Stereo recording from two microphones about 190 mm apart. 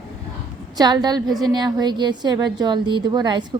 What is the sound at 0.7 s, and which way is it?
A woman's voice, 20° right (ahead or behind).